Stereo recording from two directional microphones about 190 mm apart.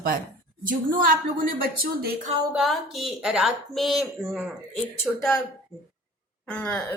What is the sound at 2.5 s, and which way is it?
A woman's voice, centre (ahead or behind).